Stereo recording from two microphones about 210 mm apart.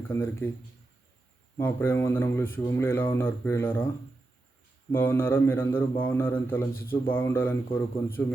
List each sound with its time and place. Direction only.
0.1 s speech: 10° left (ahead or behind)
1.5 s speech: 10° left (ahead or behind)
4.9 s speech: 10° left (ahead or behind)
6.9 s speech: 25° left (ahead or behind)
7.2 s speech: 10° left (ahead or behind)